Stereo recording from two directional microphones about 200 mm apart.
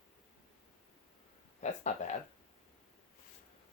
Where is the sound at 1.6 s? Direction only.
35° left (ahead or behind).